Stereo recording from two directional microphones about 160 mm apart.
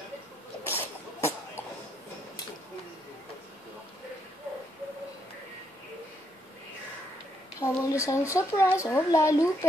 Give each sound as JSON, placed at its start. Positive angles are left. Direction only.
{"t": 0.7, "sound": "cough", "side_deg": 15}
{"t": 7.6, "sound": "speech", "side_deg": 20}